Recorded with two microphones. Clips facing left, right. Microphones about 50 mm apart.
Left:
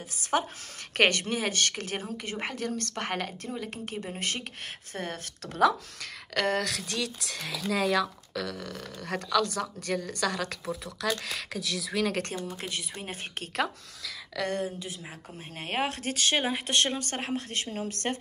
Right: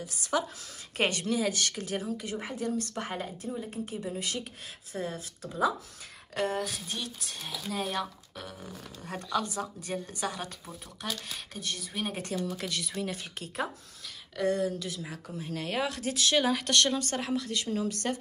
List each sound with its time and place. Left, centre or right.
0.2 s a woman's voice: left
0.9 s a woman's voice: left
12.5 s a woman's voice: left
14.3 s speech: left
14.8 s a woman's voice: left